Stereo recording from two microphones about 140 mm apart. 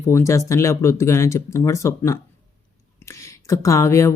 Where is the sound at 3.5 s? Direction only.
20° left (ahead or behind).